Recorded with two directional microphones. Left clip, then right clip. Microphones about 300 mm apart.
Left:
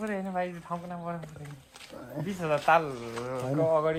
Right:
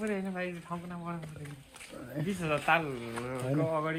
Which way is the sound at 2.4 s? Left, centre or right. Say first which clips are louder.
Left 5 dB; left.